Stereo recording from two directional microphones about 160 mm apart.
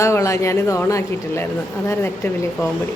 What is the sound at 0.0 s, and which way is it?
Speech, 20° left (ahead or behind).